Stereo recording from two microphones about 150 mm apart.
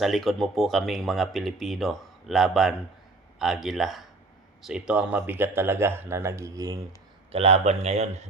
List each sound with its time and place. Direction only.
0.0 s speech: centre (ahead or behind); by 6.7 s 20° right (ahead or behind)
7.3 s a man's voice: 40° right (ahead or behind)